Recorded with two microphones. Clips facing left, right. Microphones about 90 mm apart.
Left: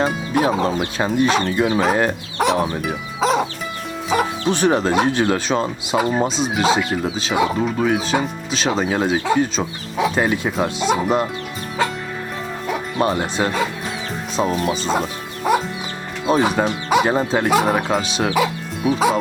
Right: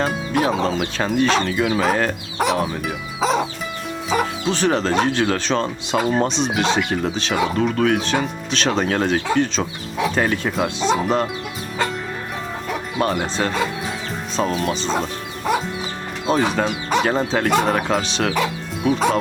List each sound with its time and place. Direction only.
0.0 s speech: centre (ahead or behind)
2.6 s music: centre (ahead or behind)
4.4 s speech: 15° left (ahead or behind)
11.8 s music: centre (ahead or behind)
13.3 s speech: 5° left (ahead or behind)
15.5 s chicken: 5° left (ahead or behind)
16.2 s speech: 5° left (ahead or behind)